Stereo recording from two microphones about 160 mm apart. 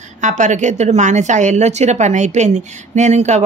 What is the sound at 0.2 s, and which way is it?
A woman's voice, 50° right (ahead or behind).